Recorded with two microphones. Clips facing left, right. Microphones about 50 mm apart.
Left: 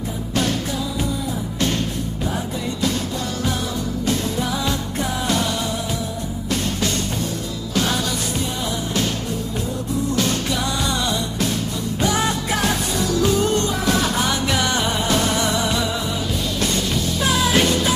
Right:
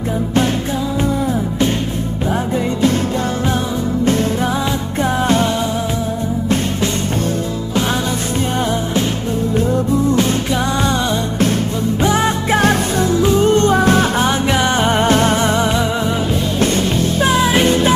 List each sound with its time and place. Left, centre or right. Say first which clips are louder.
12.0 s music: right 4 dB; right
12.5 s music: right 7 dB; right
13.1 s music: right 5 dB; right
14.9 s music: right 7 dB; right